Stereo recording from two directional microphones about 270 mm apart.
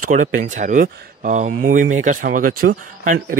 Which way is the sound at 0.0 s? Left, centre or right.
Right.